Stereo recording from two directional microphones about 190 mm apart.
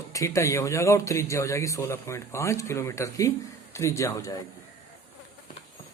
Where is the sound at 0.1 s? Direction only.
15° left (ahead or behind).